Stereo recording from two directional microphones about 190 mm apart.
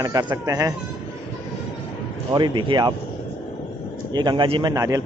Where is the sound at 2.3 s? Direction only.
25° right (ahead or behind).